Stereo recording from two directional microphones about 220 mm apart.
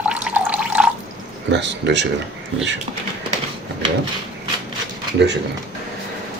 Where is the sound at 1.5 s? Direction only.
55° right (ahead or behind).